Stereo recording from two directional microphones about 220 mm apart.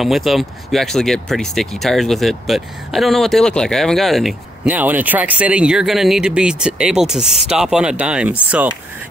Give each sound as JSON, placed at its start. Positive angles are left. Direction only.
{"t": 0.0, "sound": "speech", "side_deg": 0}